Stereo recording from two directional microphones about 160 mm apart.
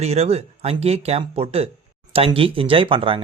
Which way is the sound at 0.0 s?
40° right (ahead or behind).